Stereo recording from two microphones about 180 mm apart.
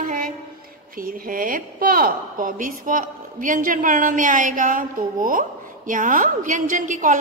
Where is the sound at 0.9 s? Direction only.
50° right (ahead or behind).